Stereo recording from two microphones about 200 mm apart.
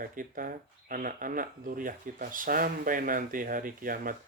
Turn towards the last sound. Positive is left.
turn(degrees=-45)  # may be behind; listen again after turning